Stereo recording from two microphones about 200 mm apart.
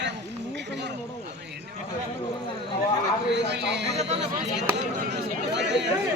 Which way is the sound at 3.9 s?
30° right (ahead or behind).